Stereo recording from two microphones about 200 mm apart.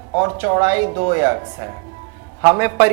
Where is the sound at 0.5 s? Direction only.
20° right (ahead or behind).